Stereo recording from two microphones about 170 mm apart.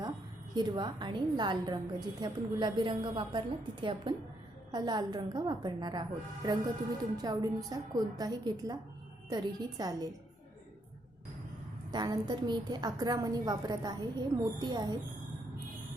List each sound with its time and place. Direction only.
0.5 s a woman's voice: 25° right (ahead or behind)
11.9 s a woman's voice: 25° right (ahead or behind)